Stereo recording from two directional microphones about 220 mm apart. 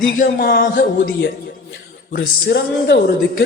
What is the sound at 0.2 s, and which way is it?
Speech, 45° left (ahead or behind).